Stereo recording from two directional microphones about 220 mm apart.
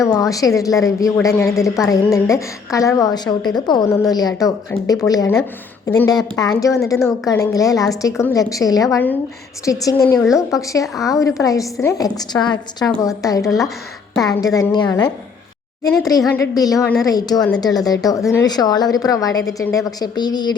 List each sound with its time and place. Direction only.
0.0 s a woman's voice: 15° left (ahead or behind)